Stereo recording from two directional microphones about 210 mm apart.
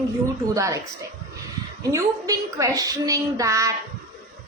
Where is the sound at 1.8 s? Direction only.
15° right (ahead or behind).